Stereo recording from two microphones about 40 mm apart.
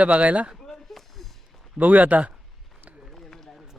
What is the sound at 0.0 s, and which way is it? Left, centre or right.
Speech, right.